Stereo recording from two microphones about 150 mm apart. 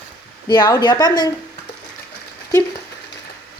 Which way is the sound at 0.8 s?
30° left (ahead or behind).